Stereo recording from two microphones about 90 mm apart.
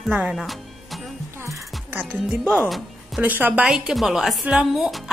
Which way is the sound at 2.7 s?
Centre (ahead or behind).